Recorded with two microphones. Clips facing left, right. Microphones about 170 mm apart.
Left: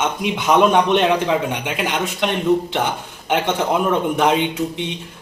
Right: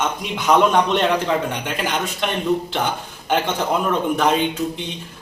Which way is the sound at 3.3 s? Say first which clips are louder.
Left 1 dB; 15° left (ahead or behind).